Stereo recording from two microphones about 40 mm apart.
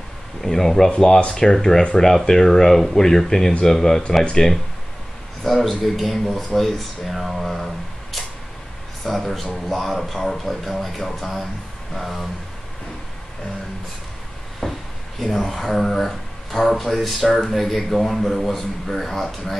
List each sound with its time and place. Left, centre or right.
0.4 s speech: centre
4.2 s speech: left
5.4 s speech: centre
14.6 s speech: centre